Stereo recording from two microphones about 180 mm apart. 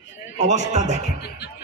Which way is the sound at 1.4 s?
70° left (ahead or behind).